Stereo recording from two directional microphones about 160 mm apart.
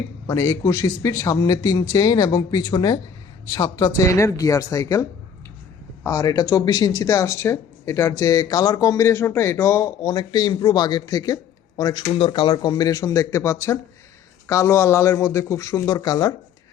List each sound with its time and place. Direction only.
0.3 s speech: 15° left (ahead or behind)
12.1 s speech: 35° left (ahead or behind)